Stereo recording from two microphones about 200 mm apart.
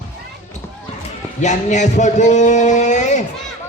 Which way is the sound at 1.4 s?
35° left (ahead or behind).